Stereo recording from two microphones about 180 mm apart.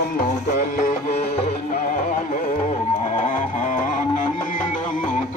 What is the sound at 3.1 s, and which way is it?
Music, 45° left (ahead or behind).